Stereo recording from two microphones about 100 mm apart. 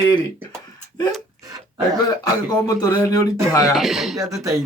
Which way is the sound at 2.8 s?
35° left (ahead or behind).